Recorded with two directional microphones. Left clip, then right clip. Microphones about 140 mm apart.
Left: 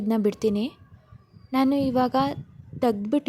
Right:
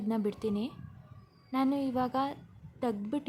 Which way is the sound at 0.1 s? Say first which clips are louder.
Left 10 dB; 45° left (ahead or behind).